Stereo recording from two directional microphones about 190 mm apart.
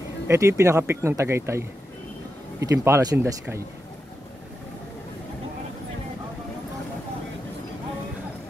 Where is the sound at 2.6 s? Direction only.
15° right (ahead or behind).